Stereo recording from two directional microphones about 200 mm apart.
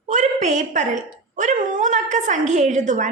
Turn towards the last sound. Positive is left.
turn(degrees=-35)  # may be behind; listen again after turning